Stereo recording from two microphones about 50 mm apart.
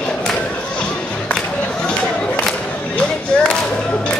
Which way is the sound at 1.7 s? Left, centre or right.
Centre.